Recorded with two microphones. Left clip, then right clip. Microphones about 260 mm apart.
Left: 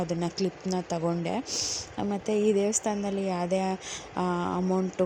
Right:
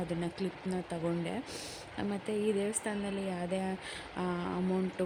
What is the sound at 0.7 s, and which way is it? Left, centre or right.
Speech, centre.